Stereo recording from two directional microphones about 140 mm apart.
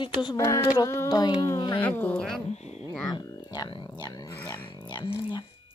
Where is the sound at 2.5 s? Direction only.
50° left (ahead or behind).